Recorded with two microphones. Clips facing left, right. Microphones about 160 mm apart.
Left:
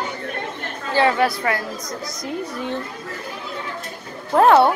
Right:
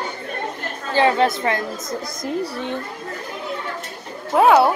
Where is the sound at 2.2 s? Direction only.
35° right (ahead or behind).